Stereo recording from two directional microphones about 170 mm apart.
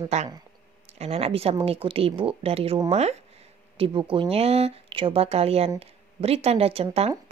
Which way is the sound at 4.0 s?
30° right (ahead or behind).